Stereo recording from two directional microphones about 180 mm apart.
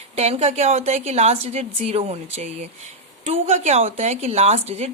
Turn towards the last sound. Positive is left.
turn(degrees=-35)  # may be behind; listen again after turning